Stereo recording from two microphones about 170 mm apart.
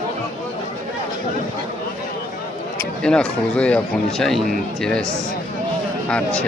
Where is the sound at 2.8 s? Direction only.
5° left (ahead or behind).